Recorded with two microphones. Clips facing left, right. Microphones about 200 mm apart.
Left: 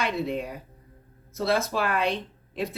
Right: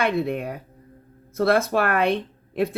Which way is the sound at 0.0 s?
60° right (ahead or behind).